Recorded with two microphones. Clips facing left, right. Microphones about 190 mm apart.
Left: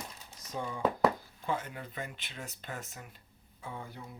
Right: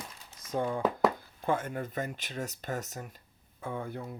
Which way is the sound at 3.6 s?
55° right (ahead or behind).